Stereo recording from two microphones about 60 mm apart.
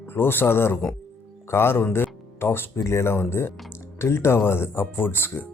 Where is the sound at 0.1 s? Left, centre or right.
Left.